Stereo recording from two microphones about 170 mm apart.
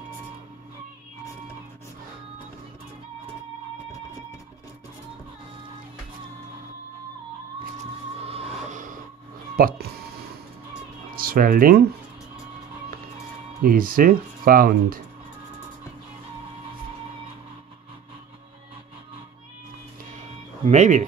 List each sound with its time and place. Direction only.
8.2 s music: 35° right (ahead or behind)
9.6 s speech: 60° right (ahead or behind)
11.1 s speech: 60° right (ahead or behind)
13.6 s speech: 55° right (ahead or behind)
20.1 s music: 45° right (ahead or behind)